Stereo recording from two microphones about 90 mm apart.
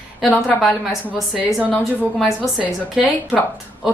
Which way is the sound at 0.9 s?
Centre (ahead or behind).